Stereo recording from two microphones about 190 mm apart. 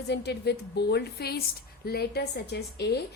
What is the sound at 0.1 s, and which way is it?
A woman's voice, 60° left (ahead or behind).